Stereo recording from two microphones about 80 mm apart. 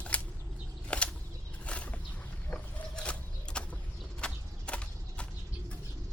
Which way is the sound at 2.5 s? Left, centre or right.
Centre.